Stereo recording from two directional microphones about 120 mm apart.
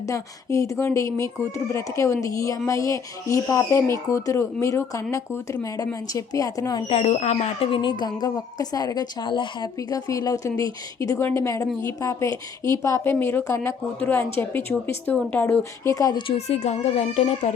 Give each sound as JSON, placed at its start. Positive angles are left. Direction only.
{"t": 0.1, "sound": "speech", "side_deg": 25}
{"t": 6.8, "sound": "speech", "side_deg": 60}
{"t": 9.7, "sound": "speech", "side_deg": 30}
{"t": 16.1, "sound": "speech", "side_deg": 45}
{"t": 16.6, "sound": "speech", "side_deg": 65}